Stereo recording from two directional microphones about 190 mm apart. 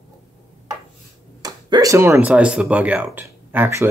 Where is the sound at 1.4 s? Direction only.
20° right (ahead or behind).